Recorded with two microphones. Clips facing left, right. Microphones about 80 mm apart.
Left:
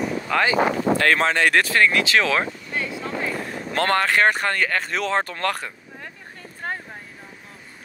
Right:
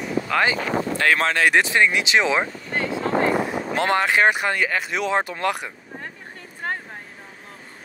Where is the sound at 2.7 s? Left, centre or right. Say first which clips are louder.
Right 5 dB; right.